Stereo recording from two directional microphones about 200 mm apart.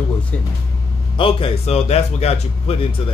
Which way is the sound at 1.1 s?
25° left (ahead or behind).